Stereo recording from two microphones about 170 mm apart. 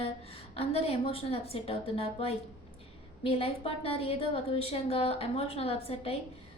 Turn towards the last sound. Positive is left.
turn(degrees=35)  # may be behind; listen again after turning